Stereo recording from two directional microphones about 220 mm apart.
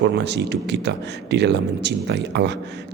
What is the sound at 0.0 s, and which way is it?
Speech, 50° right (ahead or behind).